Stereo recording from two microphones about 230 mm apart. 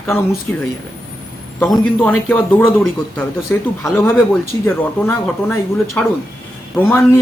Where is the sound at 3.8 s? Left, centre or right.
Centre.